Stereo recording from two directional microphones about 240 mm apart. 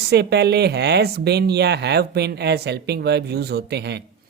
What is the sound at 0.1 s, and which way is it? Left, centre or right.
Speech, right.